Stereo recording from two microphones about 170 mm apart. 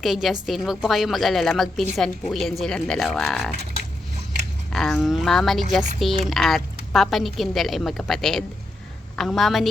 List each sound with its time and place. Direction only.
0.0 s a woman's voice: centre (ahead or behind)
4.7 s a woman's voice: centre (ahead or behind)